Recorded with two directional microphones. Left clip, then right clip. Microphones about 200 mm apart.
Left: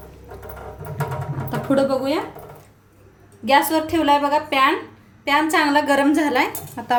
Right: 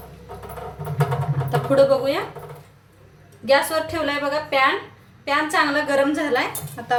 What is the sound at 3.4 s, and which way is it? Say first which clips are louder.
A woman's voice: left 2 dB; 55° left (ahead or behind).